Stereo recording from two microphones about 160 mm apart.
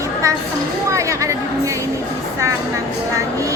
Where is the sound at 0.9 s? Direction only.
20° right (ahead or behind).